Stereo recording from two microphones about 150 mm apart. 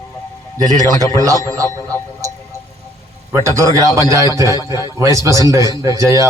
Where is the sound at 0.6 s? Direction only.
25° right (ahead or behind).